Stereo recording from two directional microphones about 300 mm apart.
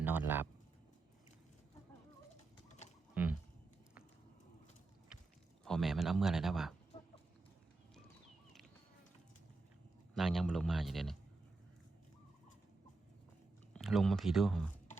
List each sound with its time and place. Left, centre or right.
0.0 s speech: centre
2.6 s a sound: left
5.6 s a man's voice: centre
10.2 s a man's voice: centre
13.7 s speech: centre